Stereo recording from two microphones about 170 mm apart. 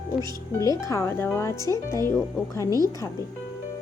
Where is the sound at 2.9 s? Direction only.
20° left (ahead or behind).